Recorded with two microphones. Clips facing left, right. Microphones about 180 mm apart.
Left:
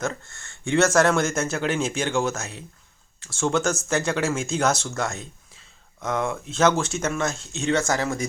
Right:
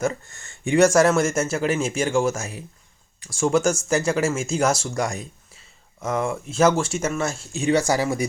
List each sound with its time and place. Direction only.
0.0 s speech: 10° right (ahead or behind)